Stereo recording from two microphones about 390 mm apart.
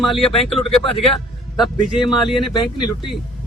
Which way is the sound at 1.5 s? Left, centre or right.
Centre.